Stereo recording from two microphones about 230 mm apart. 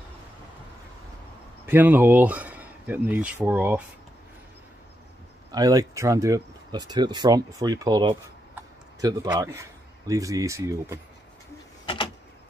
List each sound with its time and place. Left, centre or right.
1.7 s speech: centre
5.5 s speech: centre
11.8 s power windows: left